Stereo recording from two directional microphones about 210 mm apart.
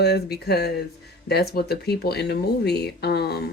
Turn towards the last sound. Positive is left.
turn(degrees=50)  # may be behind; listen again after turning